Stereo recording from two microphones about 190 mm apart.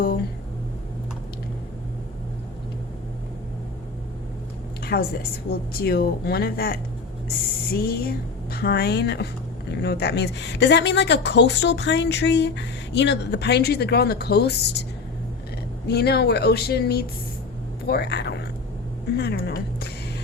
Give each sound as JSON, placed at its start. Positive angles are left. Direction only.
{"t": 4.8, "sound": "a woman's voice", "side_deg": 55}
{"t": 15.9, "sound": "a woman's voice", "side_deg": 60}